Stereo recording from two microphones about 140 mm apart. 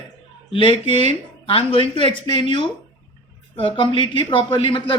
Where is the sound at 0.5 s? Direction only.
40° left (ahead or behind).